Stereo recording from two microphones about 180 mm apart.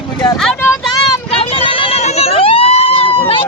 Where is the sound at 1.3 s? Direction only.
30° left (ahead or behind).